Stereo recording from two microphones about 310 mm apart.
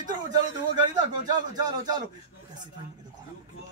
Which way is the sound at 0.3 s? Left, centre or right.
Centre.